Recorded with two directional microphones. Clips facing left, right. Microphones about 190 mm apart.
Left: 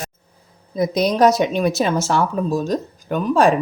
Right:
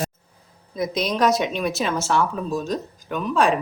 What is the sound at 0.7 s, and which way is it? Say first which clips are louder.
A woman's voice: left 6 dB; 35° left (ahead or behind).